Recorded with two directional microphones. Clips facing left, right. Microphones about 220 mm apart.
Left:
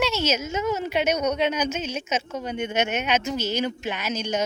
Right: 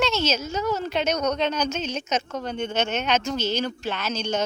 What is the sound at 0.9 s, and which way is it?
Speech, 10° left (ahead or behind).